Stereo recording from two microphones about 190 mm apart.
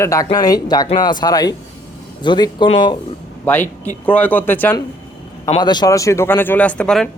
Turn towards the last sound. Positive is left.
turn(degrees=5)  # may be behind; listen again after turning